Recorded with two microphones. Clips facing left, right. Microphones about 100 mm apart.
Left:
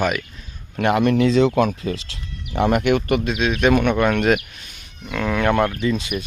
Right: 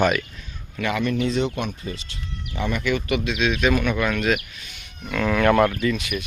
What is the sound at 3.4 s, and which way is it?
Speech, 50° left (ahead or behind).